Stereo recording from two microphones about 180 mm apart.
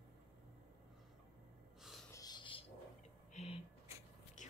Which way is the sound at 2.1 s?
25° left (ahead or behind).